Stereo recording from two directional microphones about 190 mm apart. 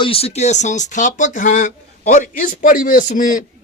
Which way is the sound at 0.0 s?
30° left (ahead or behind).